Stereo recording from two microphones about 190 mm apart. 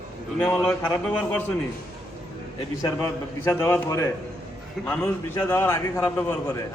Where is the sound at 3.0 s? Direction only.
10° left (ahead or behind).